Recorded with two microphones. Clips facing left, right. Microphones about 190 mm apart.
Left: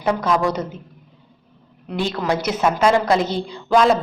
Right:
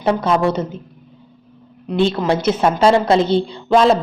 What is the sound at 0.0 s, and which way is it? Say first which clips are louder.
Speech: right 3 dB; 30° right (ahead or behind).